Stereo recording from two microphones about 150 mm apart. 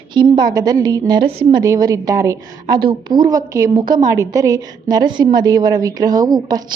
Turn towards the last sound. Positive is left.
turn(degrees=-25)  # may be behind; listen again after turning